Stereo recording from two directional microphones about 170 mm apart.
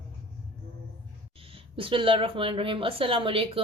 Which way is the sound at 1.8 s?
30° right (ahead or behind).